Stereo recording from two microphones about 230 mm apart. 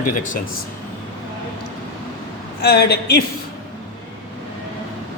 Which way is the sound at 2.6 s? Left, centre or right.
Left.